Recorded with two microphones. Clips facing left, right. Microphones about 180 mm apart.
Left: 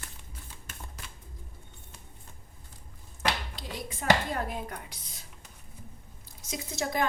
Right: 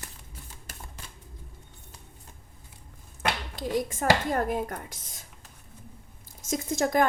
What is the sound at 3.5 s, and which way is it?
A woman's voice, 45° right (ahead or behind).